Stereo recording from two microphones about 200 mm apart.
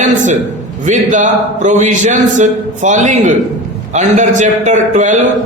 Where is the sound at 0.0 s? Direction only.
40° right (ahead or behind).